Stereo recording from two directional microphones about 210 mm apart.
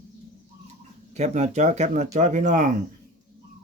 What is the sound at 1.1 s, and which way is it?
Speech, 30° right (ahead or behind).